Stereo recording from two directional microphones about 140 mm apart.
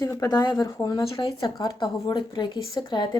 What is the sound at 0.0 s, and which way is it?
Speech, 25° left (ahead or behind).